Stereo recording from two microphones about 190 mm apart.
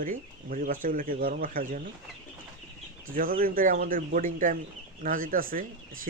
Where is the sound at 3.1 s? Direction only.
50° right (ahead or behind).